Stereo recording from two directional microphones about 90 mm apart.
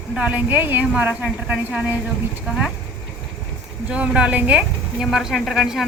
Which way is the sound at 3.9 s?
15° right (ahead or behind).